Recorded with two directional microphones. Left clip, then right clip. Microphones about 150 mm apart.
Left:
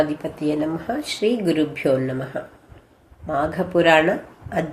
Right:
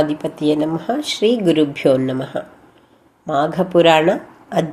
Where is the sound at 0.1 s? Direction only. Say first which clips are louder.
Right 6 dB; 25° right (ahead or behind).